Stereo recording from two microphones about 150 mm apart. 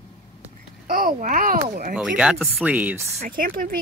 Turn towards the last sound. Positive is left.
turn(degrees=-70)  # may be behind; listen again after turning